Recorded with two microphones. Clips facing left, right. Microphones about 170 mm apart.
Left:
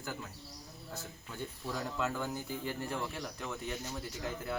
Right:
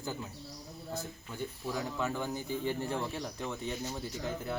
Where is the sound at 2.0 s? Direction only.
20° right (ahead or behind).